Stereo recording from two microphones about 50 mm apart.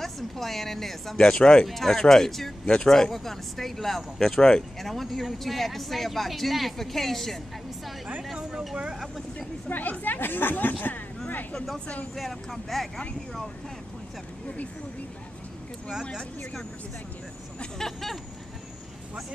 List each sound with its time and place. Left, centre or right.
0.0 s speech: centre
8.4 s speech: centre
9.0 s speech: centre
9.7 s a woman's voice: left
12.2 s speech: centre
15.9 s speech: centre
17.7 s speech: centre